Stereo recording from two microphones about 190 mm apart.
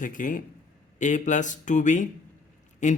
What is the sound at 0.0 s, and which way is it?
A man's voice, 45° left (ahead or behind).